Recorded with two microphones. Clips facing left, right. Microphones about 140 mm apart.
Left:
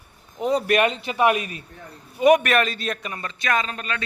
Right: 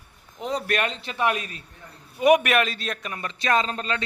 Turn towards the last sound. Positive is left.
turn(degrees=-25)  # may be behind; listen again after turning